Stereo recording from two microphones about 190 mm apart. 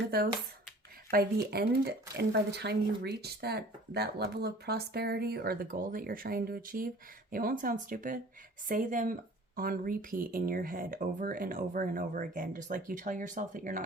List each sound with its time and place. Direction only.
0.1 s speech: 55° right (ahead or behind)